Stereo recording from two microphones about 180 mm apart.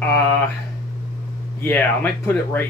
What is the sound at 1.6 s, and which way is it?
Speech, 10° left (ahead or behind).